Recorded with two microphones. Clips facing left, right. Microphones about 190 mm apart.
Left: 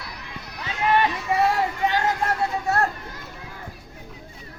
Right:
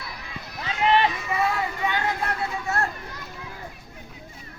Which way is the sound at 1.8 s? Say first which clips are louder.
Left 3 dB; 45° left (ahead or behind).